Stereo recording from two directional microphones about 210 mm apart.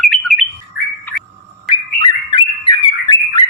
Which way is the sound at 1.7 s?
25° left (ahead or behind).